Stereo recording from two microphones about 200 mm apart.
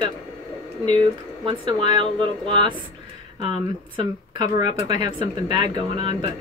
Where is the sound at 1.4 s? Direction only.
25° right (ahead or behind).